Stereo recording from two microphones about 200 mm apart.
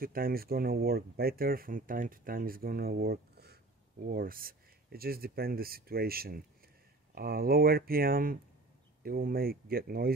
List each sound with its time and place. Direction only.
0.0 s speech: 45° right (ahead or behind)